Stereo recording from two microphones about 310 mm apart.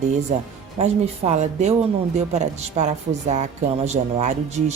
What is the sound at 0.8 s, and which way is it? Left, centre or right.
Speech, centre.